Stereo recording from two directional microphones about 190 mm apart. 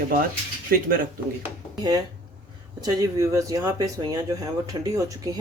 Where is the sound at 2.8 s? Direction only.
15° right (ahead or behind).